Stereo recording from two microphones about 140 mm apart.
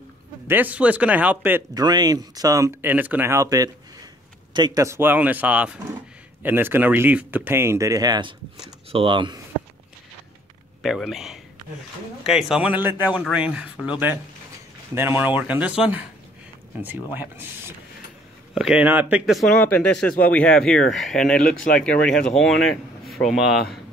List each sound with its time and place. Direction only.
0.5 s speech: 10° right (ahead or behind)
1.7 s speech: 30° right (ahead or behind)
4.8 s speech: 15° right (ahead or behind); by 9.4 s 35° right (ahead or behind)
10.8 s speech: centre (ahead or behind)
16.8 s speech: 15° right (ahead or behind)
19.5 s speech: 10° left (ahead or behind)